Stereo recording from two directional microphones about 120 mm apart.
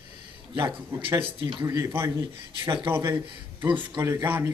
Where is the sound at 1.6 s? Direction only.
25° right (ahead or behind).